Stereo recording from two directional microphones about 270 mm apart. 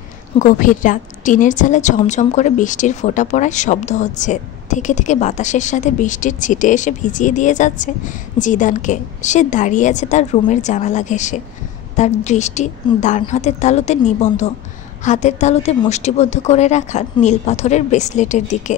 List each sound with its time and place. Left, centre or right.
0.4 s a woman's voice: left